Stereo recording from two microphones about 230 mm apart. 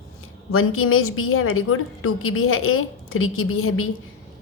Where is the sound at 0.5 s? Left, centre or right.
Left.